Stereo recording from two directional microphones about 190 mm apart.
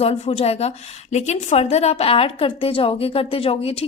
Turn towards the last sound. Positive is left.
turn(degrees=30)  # may be behind; listen again after turning